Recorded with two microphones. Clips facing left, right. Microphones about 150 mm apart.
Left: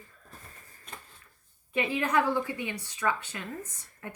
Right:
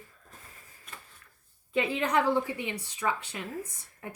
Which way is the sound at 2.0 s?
20° right (ahead or behind).